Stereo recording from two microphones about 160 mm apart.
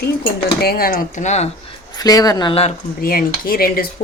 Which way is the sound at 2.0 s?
25° left (ahead or behind).